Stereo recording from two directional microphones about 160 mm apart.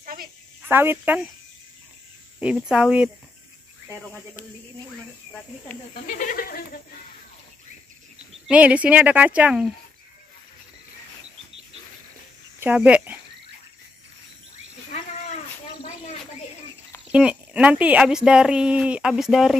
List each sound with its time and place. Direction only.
0.0 s a sound: 60° right (ahead or behind)
0.7 s speech: 15° right (ahead or behind)
2.4 s speech: 5° right (ahead or behind)
6.0 s speech: 60° left (ahead or behind)
8.5 s speech: 10° right (ahead or behind)
12.5 s speech: 10° right (ahead or behind)
17.1 s speech: 5° right (ahead or behind)